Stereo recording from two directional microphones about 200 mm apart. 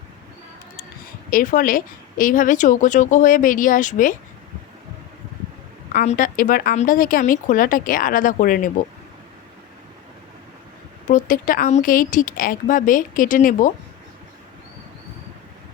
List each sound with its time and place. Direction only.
1.3 s speech: 45° left (ahead or behind)
5.9 s speech: 40° left (ahead or behind)
11.1 s speech: 45° left (ahead or behind)